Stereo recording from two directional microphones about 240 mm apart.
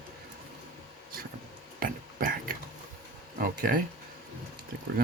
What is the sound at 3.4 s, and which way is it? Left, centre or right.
Speech, right.